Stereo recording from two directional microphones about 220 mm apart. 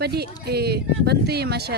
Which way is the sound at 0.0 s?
45° right (ahead or behind).